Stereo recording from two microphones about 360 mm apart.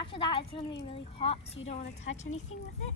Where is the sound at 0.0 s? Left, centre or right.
Centre.